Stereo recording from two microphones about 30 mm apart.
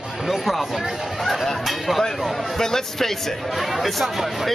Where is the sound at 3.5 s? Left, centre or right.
Centre.